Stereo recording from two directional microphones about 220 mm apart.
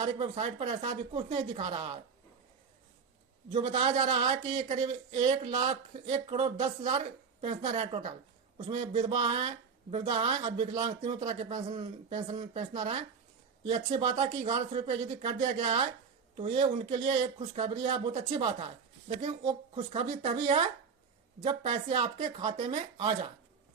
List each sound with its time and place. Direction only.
0.0 s speech: 30° right (ahead or behind)
3.5 s speech: 25° right (ahead or behind)